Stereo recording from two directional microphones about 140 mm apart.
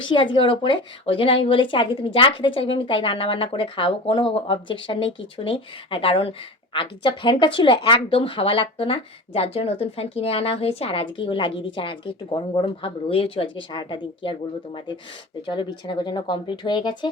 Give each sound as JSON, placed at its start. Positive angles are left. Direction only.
{"t": 0.0, "sound": "speech", "side_deg": 35}